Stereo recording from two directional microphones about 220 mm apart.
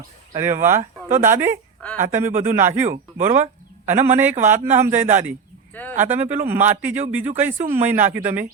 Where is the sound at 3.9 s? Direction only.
10° right (ahead or behind).